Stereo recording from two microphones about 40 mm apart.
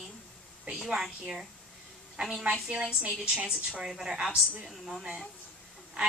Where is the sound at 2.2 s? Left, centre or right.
Right.